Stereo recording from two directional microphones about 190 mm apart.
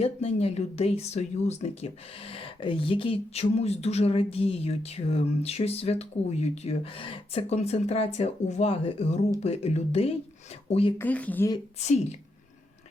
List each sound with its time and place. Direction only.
0.0 s speech: 30° left (ahead or behind)
10.9 s speech: 10° left (ahead or behind)
11.8 s speech: 35° left (ahead or behind)